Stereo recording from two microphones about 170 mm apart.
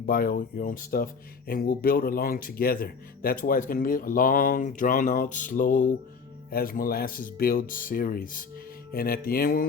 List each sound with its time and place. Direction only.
0.0 s speech: 60° left (ahead or behind)